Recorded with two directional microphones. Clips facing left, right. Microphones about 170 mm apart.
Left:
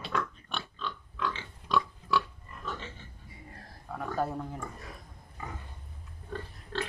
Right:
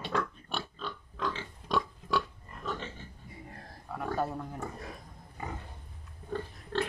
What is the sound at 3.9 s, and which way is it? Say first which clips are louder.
Speech: even; 5° right (ahead or behind).